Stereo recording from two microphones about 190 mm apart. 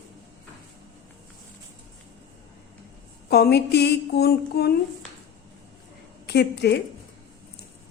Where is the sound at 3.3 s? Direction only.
55° left (ahead or behind).